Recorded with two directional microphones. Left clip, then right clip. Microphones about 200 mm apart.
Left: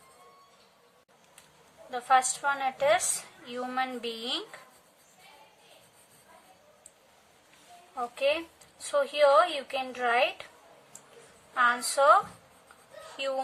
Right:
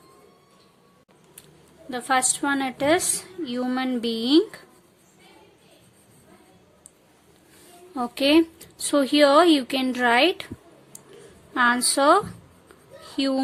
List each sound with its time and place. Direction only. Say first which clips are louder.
1.9 s a woman's voice: right 2 dB; 40° right (ahead or behind)
7.9 s a woman's voice: right 9 dB; 45° right (ahead or behind)
11.5 s a woman's voice: right 5 dB; 35° right (ahead or behind)